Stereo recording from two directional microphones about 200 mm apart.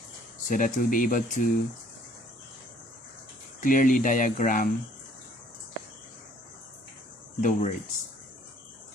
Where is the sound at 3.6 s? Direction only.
40° left (ahead or behind).